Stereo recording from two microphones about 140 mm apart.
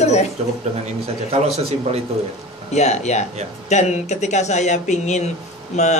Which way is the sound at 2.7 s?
55° left (ahead or behind).